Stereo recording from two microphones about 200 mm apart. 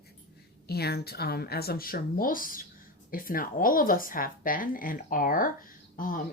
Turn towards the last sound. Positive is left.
turn(degrees=45)  # may be behind; listen again after turning